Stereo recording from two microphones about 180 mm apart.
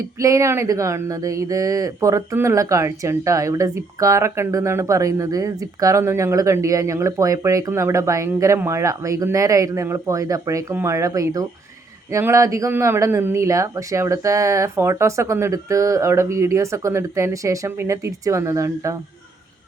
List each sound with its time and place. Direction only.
0.0 s speech: 15° right (ahead or behind)